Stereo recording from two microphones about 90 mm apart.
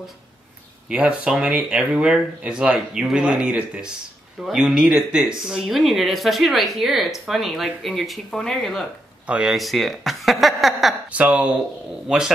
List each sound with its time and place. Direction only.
0.8 s speech: 10° right (ahead or behind)
9.2 s speech: 15° right (ahead or behind)
9.5 s speech: centre (ahead or behind)
11.1 s speech: 15° right (ahead or behind)